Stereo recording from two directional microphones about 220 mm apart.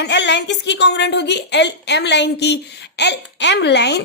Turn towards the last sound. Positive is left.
turn(degrees=50)  # may be behind; listen again after turning